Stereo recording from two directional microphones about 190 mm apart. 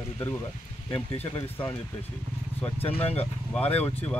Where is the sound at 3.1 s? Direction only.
10° left (ahead or behind).